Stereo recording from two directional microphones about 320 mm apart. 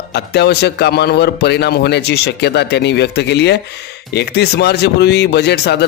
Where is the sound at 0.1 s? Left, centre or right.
Left.